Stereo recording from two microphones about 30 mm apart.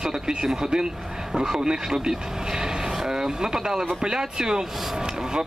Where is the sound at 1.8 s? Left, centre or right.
Centre.